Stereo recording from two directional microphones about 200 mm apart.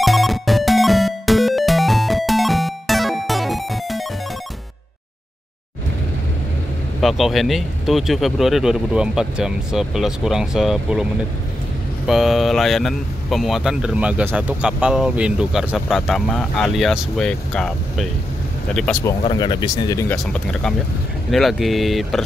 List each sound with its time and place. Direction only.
0.0 s music: centre (ahead or behind)
7.0 s speech: centre (ahead or behind)
12.1 s speech: centre (ahead or behind)
19.2 s speech: 20° left (ahead or behind)
20.2 s speech: 5° left (ahead or behind)